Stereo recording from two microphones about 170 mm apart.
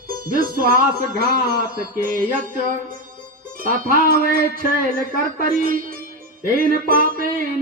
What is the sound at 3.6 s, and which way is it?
Music, 55° right (ahead or behind).